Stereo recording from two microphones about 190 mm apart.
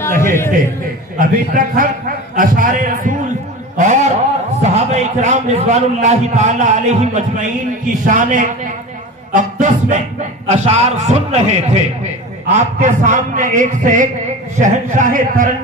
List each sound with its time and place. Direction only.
0.0 s a man's voice: 15° left (ahead or behind)
1.1 s a man's voice: 45° right (ahead or behind)
9.3 s music: 40° right (ahead or behind)
10.4 s a man's voice: 35° right (ahead or behind)